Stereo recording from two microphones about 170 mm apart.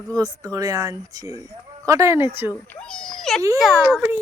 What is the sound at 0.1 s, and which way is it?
Speech, 20° right (ahead or behind).